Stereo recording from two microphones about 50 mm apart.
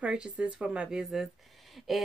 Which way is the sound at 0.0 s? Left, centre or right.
Right.